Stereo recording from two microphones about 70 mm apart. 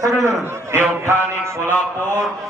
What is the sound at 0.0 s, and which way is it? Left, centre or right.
Speech, right.